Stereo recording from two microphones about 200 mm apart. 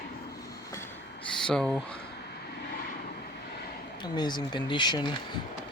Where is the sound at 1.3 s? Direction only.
5° left (ahead or behind).